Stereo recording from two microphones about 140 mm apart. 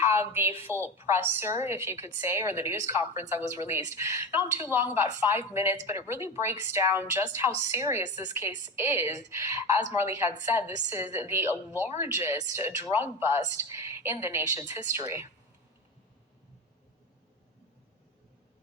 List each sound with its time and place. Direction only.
0.0 s a woman's voice: 15° right (ahead or behind)